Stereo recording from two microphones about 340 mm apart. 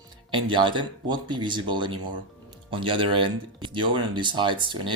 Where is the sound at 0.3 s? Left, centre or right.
Centre.